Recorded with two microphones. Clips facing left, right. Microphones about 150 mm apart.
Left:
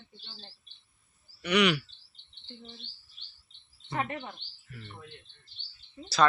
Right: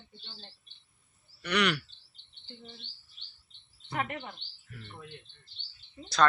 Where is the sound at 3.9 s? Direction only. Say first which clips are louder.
Left 1 dB; 25° left (ahead or behind).